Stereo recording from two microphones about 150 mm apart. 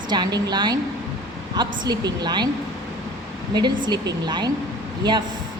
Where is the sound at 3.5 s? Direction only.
30° right (ahead or behind).